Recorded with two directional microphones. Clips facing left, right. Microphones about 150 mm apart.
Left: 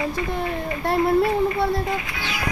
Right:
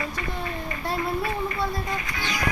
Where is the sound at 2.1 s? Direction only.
5° left (ahead or behind).